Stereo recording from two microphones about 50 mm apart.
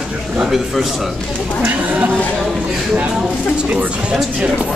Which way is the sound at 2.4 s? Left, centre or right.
Centre.